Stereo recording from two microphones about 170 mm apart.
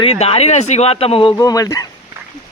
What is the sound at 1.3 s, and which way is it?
Speech, 20° left (ahead or behind).